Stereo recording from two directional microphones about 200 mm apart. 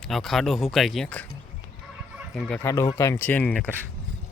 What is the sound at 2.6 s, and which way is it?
Speech, 15° left (ahead or behind).